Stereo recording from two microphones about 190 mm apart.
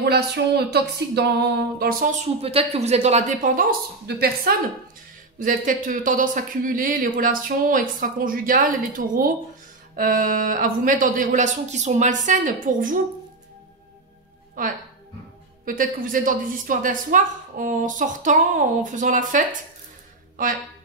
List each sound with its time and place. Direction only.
0.0 s speech: 60° right (ahead or behind)
1.8 s speech: 50° right (ahead or behind)
2.4 s speech: 30° right (ahead or behind)
4.1 s speech: 55° right (ahead or behind)
14.6 s speech: 45° right (ahead or behind)